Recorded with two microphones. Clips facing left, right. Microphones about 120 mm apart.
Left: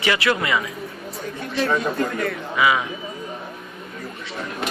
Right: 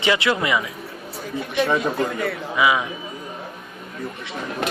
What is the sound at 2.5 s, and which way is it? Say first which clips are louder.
Speech: even; 15° right (ahead or behind).